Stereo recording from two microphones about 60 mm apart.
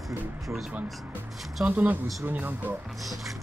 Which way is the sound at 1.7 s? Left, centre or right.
Right.